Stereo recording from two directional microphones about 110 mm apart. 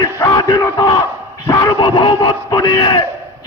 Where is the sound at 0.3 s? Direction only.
40° left (ahead or behind).